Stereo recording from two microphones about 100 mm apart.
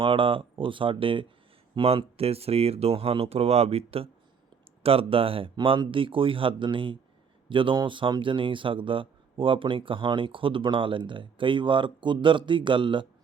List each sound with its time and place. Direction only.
0.0 s speech: 60° right (ahead or behind)
5.5 s speech: 55° right (ahead or behind)